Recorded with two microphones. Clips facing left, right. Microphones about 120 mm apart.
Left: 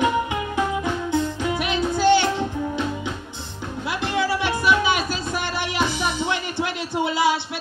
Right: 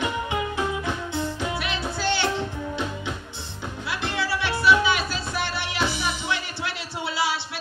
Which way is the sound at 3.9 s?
15° left (ahead or behind).